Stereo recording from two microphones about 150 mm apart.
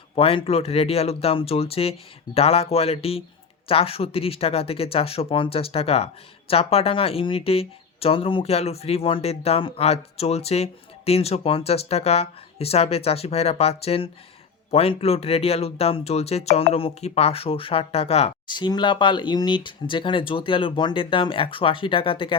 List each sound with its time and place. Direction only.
0.2 s speech: 40° left (ahead or behind)
18.4 s speech: 30° left (ahead or behind)